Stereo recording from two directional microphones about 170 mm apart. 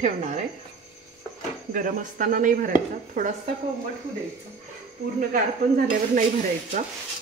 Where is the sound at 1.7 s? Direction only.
50° right (ahead or behind).